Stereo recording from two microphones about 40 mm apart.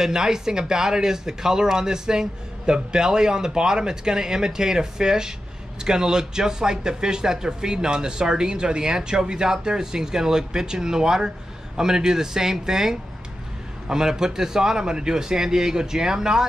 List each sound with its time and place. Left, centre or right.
0.0 s speech: centre